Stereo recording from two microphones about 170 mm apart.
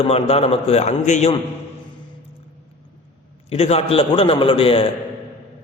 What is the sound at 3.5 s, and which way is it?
A man's voice, 35° left (ahead or behind).